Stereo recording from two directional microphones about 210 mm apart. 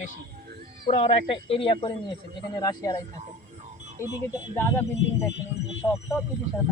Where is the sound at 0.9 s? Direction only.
25° left (ahead or behind).